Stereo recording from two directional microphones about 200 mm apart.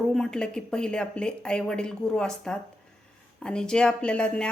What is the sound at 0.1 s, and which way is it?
Speech, 5° left (ahead or behind).